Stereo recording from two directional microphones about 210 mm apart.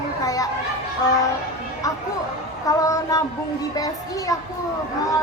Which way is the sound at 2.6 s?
15° left (ahead or behind).